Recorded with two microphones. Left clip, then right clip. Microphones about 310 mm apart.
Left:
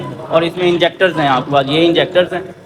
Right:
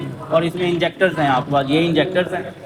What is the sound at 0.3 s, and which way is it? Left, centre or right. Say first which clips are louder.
A man's voice: left 5 dB; left.